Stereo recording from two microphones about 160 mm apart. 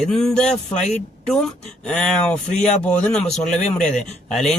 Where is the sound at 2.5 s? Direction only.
50° left (ahead or behind).